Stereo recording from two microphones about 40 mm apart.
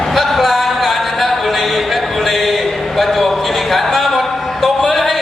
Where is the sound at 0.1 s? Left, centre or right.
Centre.